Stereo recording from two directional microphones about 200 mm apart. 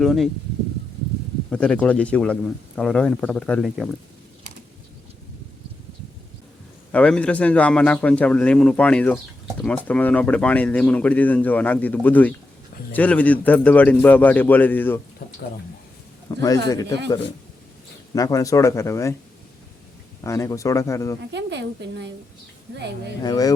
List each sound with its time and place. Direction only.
0.0 s a man's voice: centre (ahead or behind)
1.5 s a man's voice: 5° left (ahead or behind)
6.9 s a man's voice: 5° left (ahead or behind)
16.3 s speech: 15° left (ahead or behind)
18.1 s speech: 15° left (ahead or behind)
20.2 s speech: 15° left (ahead or behind)
21.2 s a woman's voice: 60° right (ahead or behind)
23.2 s speech: 20° left (ahead or behind)